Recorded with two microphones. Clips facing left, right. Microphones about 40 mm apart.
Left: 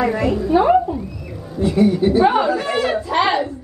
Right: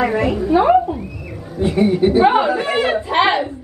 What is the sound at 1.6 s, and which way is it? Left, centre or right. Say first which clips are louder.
A woman's voice: right 1 dB; right.